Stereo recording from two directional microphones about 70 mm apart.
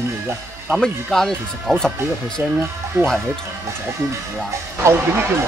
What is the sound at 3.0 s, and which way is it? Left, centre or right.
Speech, right.